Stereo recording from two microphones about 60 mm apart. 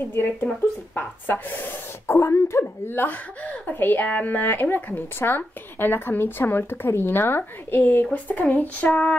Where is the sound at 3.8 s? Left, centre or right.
Left.